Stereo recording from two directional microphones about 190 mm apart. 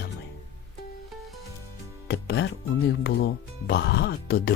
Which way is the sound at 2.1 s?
65° left (ahead or behind).